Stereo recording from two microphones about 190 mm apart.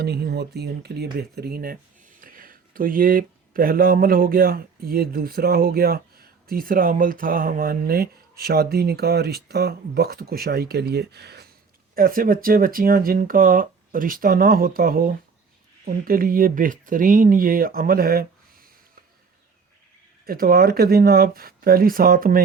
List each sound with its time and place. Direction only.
0.0 s speech: 60° right (ahead or behind)
20.2 s speech: 50° right (ahead or behind)